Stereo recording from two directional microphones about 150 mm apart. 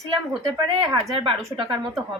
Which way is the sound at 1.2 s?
30° right (ahead or behind).